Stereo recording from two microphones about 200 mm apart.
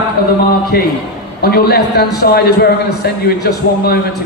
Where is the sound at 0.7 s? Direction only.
50° left (ahead or behind).